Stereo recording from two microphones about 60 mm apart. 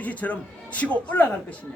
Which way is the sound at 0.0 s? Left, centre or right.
Left.